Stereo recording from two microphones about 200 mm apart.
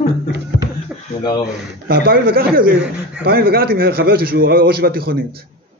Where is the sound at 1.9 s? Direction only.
50° right (ahead or behind).